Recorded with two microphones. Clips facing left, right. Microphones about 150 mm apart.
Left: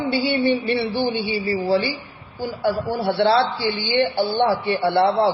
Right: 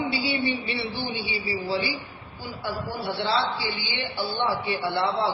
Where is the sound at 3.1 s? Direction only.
60° left (ahead or behind).